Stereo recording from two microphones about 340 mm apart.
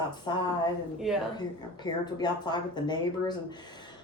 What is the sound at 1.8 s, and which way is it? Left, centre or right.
Speech, centre.